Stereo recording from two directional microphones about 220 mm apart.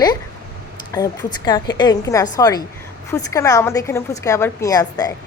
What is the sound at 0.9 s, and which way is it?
A woman's voice, 20° left (ahead or behind).